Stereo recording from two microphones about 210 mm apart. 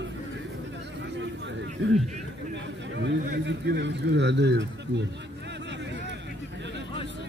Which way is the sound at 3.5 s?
55° right (ahead or behind).